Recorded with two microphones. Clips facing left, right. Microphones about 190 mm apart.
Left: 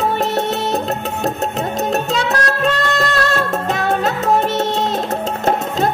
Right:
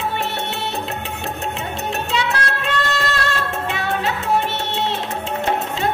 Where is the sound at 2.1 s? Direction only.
40° left (ahead or behind).